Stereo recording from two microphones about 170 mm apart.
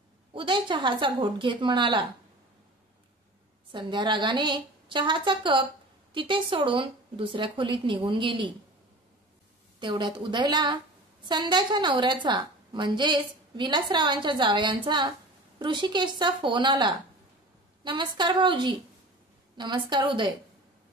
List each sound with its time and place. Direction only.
0.3 s a woman's voice: 30° right (ahead or behind)
3.7 s a woman's voice: 30° right (ahead or behind)
9.8 s a woman's voice: 30° right (ahead or behind)